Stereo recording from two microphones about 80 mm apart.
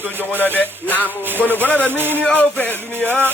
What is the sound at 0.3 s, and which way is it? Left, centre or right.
Music, left.